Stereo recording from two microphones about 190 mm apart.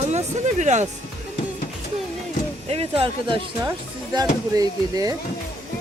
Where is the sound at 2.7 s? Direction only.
30° right (ahead or behind).